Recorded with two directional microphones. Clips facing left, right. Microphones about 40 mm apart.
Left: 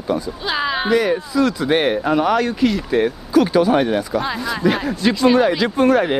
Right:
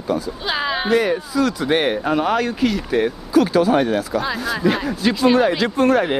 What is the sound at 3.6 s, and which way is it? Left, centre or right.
Speech, left.